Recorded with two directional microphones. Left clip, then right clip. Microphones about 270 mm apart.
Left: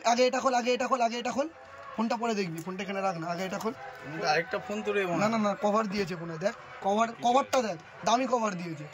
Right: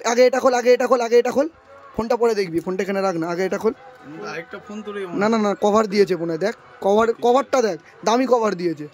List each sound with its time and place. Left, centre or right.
0.0 s a man's voice: centre
4.8 s speech: centre
5.3 s a man's voice: right